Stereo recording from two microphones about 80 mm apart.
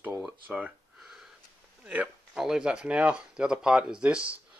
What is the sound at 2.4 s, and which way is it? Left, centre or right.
Speech, centre.